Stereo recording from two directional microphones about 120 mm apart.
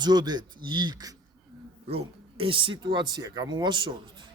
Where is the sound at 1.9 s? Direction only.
50° right (ahead or behind).